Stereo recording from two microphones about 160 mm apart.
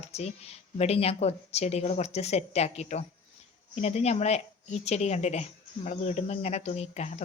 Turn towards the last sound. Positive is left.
turn(degrees=45)  # may be behind; listen again after turning